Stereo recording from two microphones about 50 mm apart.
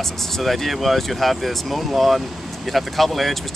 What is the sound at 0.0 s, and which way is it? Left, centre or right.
Speech, centre.